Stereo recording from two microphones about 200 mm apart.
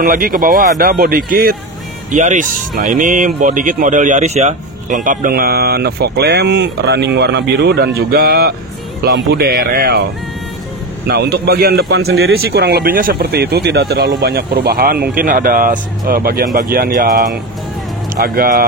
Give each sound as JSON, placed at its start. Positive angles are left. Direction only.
{"t": 0.0, "sound": "speech", "side_deg": -45}
{"t": 2.1, "sound": "speech", "side_deg": -35}
{"t": 11.1, "sound": "speech", "side_deg": -55}